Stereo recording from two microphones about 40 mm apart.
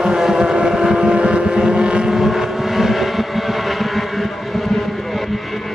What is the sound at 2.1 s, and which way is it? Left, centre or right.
Vehicle, centre.